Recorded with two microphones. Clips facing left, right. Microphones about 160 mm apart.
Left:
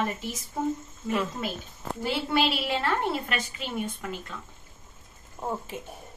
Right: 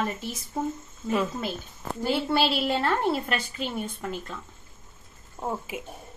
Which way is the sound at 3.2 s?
40° right (ahead or behind).